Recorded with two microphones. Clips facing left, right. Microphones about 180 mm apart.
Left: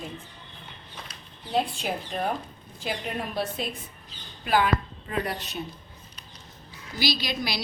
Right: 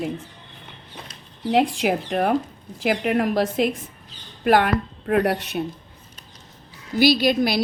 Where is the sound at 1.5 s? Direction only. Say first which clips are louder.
Right 8 dB; 85° right.